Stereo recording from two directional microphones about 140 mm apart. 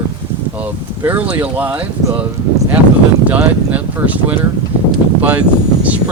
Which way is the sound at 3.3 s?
10° right (ahead or behind).